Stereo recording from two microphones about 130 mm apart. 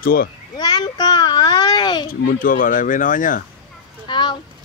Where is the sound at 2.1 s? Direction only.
90° left.